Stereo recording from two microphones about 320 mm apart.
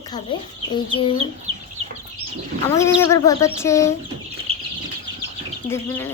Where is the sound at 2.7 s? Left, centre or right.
Centre.